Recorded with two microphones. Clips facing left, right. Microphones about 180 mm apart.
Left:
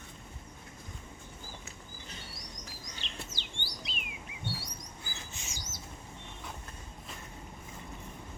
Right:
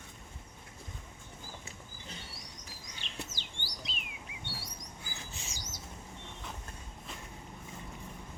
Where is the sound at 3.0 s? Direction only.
45° right (ahead or behind).